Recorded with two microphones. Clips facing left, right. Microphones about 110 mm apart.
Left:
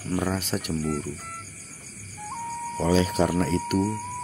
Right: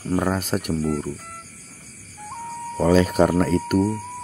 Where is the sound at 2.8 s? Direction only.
50° right (ahead or behind).